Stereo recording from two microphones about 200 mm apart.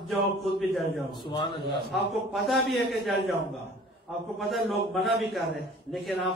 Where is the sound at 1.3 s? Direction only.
20° left (ahead or behind).